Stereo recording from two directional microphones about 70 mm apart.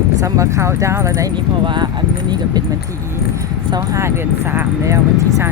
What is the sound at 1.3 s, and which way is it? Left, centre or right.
Speech, right.